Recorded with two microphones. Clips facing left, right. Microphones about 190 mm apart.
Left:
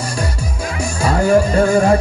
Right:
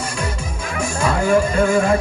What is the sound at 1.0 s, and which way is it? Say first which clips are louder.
Music: left 3 dB; 40° left (ahead or behind).